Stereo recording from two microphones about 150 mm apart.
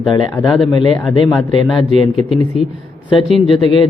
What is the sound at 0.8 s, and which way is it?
Speech, 30° left (ahead or behind).